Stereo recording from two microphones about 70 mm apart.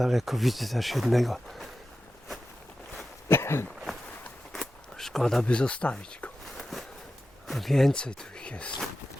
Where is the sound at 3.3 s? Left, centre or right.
Left.